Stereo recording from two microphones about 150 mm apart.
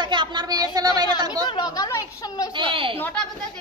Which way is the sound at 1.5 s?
25° left (ahead or behind).